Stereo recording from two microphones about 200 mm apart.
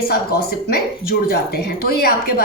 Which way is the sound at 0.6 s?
50° left (ahead or behind).